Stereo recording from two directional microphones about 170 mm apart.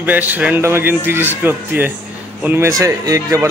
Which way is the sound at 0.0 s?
10° right (ahead or behind).